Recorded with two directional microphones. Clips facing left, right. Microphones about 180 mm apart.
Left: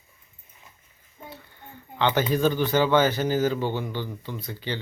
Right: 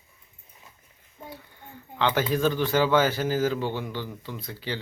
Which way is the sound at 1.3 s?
5° right (ahead or behind).